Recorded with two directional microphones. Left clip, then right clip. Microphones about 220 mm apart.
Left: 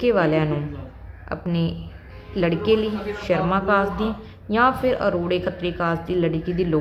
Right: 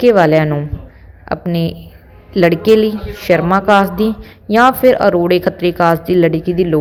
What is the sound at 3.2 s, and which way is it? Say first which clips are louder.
A woman's voice: right 10 dB; 25° right (ahead or behind).